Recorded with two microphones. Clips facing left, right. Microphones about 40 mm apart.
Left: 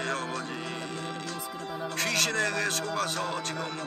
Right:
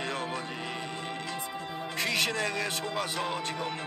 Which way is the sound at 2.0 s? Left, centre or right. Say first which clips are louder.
Left 1 dB; right.